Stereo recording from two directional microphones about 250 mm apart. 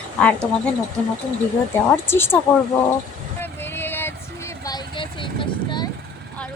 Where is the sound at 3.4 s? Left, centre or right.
Centre.